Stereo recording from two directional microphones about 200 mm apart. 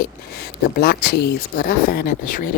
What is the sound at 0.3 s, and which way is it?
Speech, 50° left (ahead or behind).